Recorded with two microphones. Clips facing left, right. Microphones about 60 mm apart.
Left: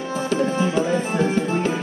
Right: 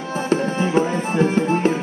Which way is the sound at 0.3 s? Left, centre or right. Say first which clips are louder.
Right 2 dB; right.